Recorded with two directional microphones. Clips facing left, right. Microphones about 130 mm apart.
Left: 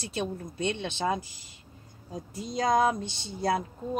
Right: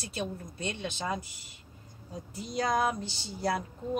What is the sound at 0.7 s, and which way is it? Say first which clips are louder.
Speech: left 4 dB; 25° left (ahead or behind).